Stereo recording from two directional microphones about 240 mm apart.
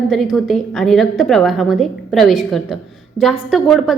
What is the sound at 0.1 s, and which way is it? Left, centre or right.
A woman's voice, centre.